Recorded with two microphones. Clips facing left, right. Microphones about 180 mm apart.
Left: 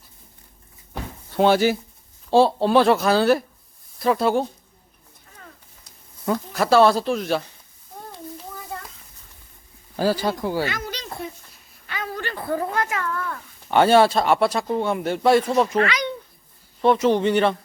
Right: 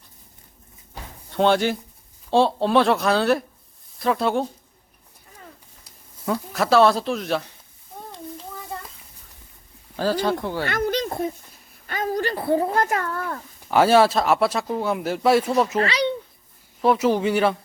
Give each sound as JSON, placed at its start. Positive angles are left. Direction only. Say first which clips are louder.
{"t": 1.4, "sound": "speech", "louder": "left 2 dB", "side_deg": 5}
{"t": 6.2, "sound": "speech", "louder": "left 1 dB", "side_deg": 0}
{"t": 7.9, "sound": "child singing", "louder": "even", "side_deg": 0}
{"t": 10.0, "sound": "speech", "louder": "even", "side_deg": 10}
{"t": 10.7, "sound": "a sound", "louder": "right 8 dB", "side_deg": -55}
{"t": 11.9, "sound": "speech", "louder": "right 6 dB", "side_deg": -45}
{"t": 13.7, "sound": "speech", "louder": "left 1 dB", "side_deg": -5}
{"t": 15.8, "sound": "speech", "louder": "even", "side_deg": -30}
{"t": 16.8, "sound": "speech", "louder": "left 1 dB", "side_deg": -5}